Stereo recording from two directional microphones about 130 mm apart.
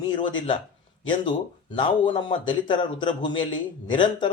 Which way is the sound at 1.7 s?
35° left (ahead or behind).